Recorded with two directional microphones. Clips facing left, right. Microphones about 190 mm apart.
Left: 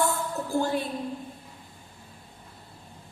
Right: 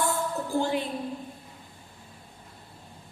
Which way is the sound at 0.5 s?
20° right (ahead or behind).